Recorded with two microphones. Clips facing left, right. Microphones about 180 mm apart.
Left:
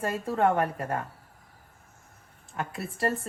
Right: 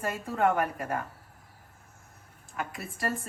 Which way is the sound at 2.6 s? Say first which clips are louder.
Left 4 dB; 30° left (ahead or behind).